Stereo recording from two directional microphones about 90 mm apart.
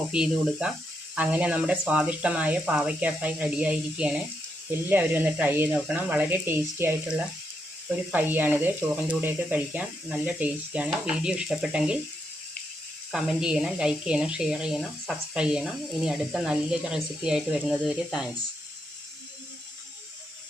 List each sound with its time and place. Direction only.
0.1 s speech: 10° right (ahead or behind)
13.1 s speech: 5° right (ahead or behind)
15.4 s speech: 10° right (ahead or behind)